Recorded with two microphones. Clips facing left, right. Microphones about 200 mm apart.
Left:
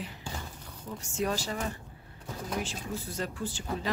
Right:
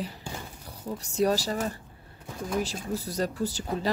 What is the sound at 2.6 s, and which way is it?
Speech, 40° right (ahead or behind).